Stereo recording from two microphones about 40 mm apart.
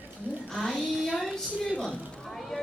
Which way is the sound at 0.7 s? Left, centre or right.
Centre.